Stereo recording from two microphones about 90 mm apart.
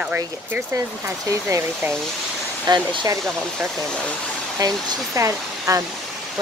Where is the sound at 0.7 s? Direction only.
40° right (ahead or behind).